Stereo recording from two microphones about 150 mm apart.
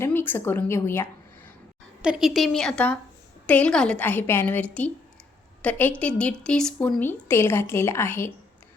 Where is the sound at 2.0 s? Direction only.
5° right (ahead or behind).